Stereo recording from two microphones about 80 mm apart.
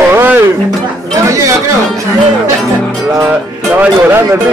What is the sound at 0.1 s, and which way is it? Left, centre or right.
Music, right.